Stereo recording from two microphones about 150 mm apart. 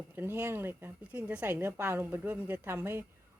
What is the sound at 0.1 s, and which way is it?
Speech, 15° right (ahead or behind).